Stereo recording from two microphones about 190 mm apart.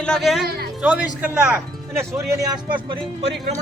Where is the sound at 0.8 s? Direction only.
5° right (ahead or behind).